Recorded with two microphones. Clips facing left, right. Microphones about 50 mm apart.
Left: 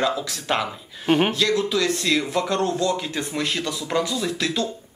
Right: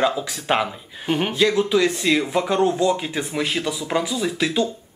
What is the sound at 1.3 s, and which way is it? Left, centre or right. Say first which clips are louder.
Speech: right 3 dB; centre.